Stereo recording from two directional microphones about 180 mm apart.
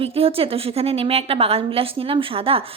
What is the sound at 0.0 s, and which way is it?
A woman's voice, 30° right (ahead or behind).